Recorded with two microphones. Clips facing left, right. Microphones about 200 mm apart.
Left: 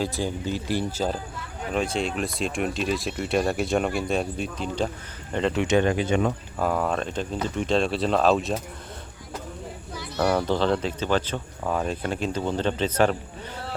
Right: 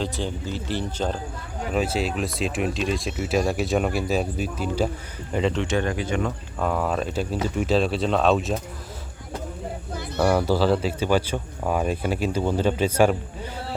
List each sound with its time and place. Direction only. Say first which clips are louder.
0.0 s speech: left 1 dB; 10° left (ahead or behind)
1.7 s speech: right 1 dB; 5° right (ahead or behind)
5.5 s speech: left 3 dB; 20° left (ahead or behind)
6.6 s speech: right 1 dB; centre (ahead or behind)
10.2 s speech: right 2 dB; 10° right (ahead or behind)